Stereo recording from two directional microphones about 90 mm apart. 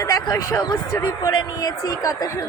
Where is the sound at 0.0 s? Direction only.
40° left (ahead or behind).